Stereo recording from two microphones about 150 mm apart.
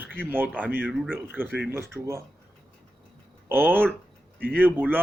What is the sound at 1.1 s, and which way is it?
Speech, 10° right (ahead or behind).